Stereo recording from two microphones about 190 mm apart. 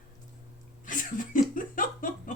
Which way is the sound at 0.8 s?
45° left (ahead or behind).